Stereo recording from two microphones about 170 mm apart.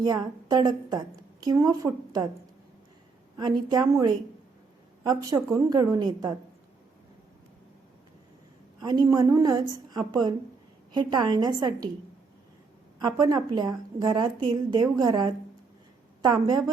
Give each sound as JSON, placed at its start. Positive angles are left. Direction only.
{"t": 0.0, "sound": "a woman's voice", "side_deg": -25}
{"t": 3.3, "sound": "a woman's voice", "side_deg": -25}
{"t": 8.8, "sound": "a woman's voice", "side_deg": -20}
{"t": 13.0, "sound": "a woman's voice", "side_deg": -20}